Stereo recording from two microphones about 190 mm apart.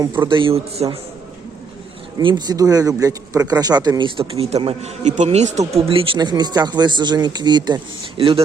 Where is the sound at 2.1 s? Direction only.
20° right (ahead or behind).